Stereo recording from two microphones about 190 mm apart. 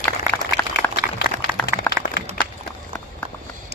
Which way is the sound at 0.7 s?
55° left (ahead or behind).